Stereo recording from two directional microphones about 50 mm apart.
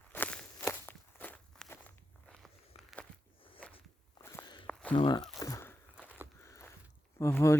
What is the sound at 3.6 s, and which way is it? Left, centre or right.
Walk, left.